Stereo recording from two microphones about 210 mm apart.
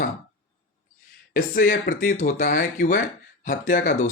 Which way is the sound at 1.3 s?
40° left (ahead or behind).